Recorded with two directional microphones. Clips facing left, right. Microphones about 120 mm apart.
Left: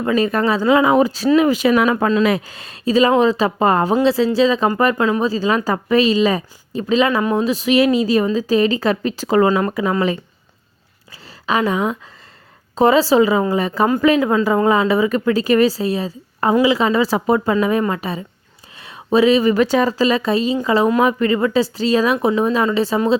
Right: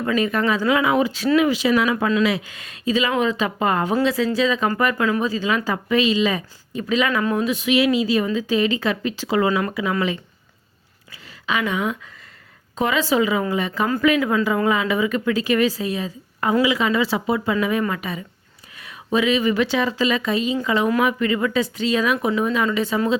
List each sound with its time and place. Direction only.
0.0 s speech: 30° left (ahead or behind)